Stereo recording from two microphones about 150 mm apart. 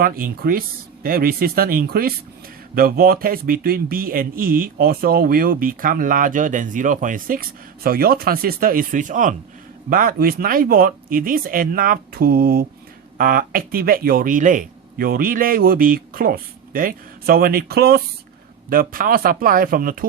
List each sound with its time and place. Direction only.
0.0 s speech: 75° right (ahead or behind)
7.9 s speech: 85° right; by 9.3 s 60° right (ahead or behind)
9.9 s speech: 75° right (ahead or behind); by 18.0 s 90° right
18.7 s speech: 70° right (ahead or behind)